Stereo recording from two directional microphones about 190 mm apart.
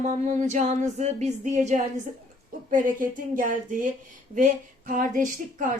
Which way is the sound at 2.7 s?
45° right (ahead or behind).